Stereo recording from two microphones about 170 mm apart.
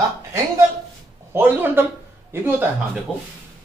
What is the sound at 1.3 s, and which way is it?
Speech, 10° right (ahead or behind).